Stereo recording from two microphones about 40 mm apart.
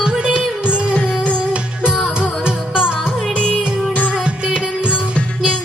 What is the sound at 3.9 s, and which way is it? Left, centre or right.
Music, left.